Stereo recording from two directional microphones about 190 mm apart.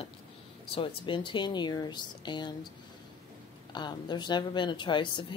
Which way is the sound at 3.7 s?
25° left (ahead or behind).